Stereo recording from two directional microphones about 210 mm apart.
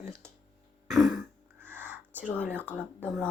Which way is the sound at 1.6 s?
10° right (ahead or behind).